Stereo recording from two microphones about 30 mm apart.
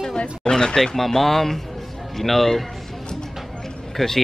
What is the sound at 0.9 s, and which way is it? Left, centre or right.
Speech, centre.